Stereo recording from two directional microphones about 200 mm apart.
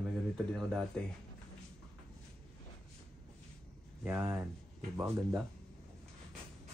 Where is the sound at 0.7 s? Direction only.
Centre (ahead or behind).